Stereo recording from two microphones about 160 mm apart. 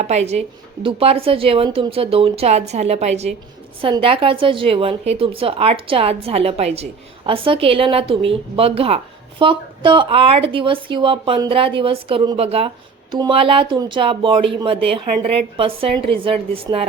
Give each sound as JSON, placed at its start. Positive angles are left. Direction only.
{"t": 0.0, "sound": "a woman's voice", "side_deg": -40}